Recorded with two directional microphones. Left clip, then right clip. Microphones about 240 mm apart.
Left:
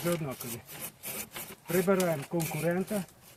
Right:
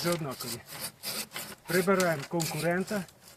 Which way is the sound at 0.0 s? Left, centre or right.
Centre.